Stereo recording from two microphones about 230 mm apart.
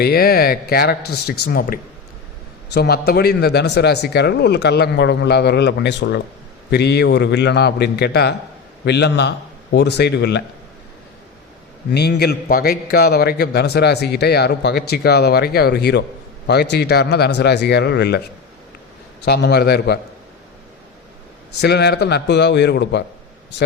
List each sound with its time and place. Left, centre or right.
0.0 s a man's voice: left
11.9 s a man's voice: left
19.2 s a man's voice: left
21.6 s a man's voice: left